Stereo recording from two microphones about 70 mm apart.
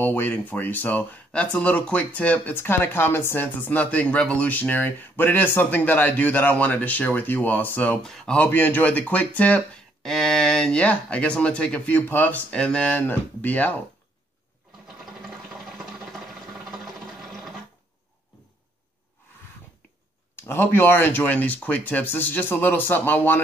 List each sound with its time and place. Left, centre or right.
0.0 s speech: left
2.5 s speech: left
8.0 s speech: centre
8.4 s speech: left
10.0 s speech: centre; by 12.4 s left
12.4 s speech: centre
16.8 s sewing machine: centre
20.3 s speech: left